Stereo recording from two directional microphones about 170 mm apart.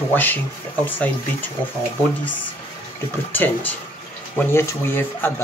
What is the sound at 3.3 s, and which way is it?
Speech, 10° left (ahead or behind).